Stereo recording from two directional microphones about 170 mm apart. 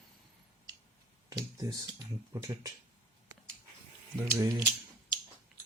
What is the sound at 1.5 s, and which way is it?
Speech, 25° right (ahead or behind).